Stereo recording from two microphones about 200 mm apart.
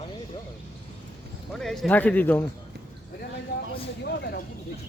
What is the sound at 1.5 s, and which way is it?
Speech, centre (ahead or behind).